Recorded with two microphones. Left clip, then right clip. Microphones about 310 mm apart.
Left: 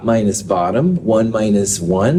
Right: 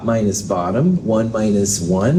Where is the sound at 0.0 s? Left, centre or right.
Left.